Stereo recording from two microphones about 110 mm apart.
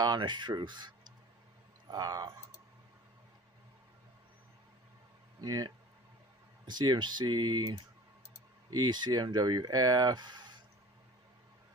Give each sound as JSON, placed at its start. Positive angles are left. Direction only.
{"t": 0.0, "sound": "speech", "side_deg": -40}
{"t": 5.4, "sound": "speech", "side_deg": -35}